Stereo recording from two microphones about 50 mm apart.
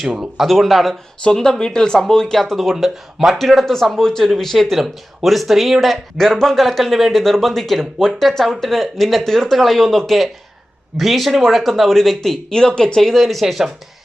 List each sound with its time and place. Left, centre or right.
0.0 s speech: centre
1.2 s speech: centre